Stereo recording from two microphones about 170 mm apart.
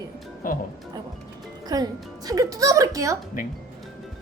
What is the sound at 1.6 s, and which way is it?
Speech, 20° right (ahead or behind).